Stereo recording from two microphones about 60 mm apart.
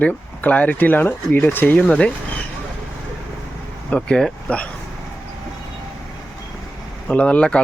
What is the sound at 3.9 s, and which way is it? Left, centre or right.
Speech, centre.